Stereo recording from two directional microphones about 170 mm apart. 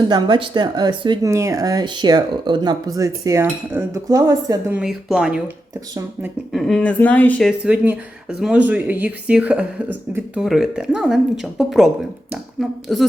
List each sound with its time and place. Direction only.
0.1 s speech: 25° right (ahead or behind)
4.7 s speech: 5° right (ahead or behind)
7.6 s speech: 5° right (ahead or behind)